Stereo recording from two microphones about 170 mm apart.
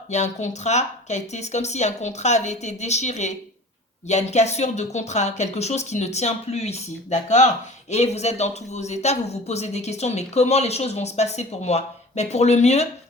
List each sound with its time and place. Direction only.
0.1 s speech: 45° left (ahead or behind)